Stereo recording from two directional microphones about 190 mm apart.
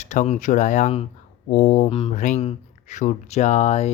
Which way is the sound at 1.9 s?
30° left (ahead or behind).